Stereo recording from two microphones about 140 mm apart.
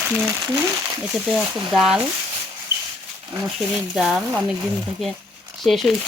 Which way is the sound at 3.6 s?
Centre (ahead or behind).